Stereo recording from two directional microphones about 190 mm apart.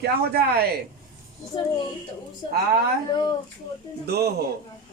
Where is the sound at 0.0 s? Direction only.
55° right (ahead or behind).